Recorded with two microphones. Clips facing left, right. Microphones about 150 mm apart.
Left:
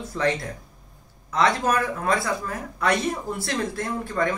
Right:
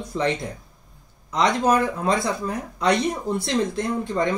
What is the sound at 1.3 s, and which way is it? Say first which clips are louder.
Speech: right 2 dB; 20° right (ahead or behind).